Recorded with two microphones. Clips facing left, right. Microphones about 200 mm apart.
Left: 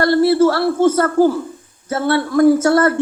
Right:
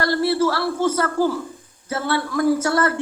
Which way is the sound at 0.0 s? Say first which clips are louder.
Left 7 dB; 50° left (ahead or behind).